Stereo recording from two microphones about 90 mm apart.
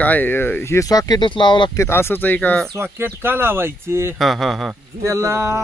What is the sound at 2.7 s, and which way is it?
Speech, 25° right (ahead or behind).